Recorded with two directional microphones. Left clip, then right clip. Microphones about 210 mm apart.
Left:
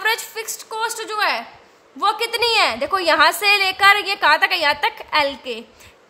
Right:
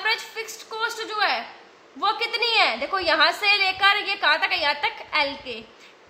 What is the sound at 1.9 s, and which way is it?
A woman's voice, 55° left (ahead or behind).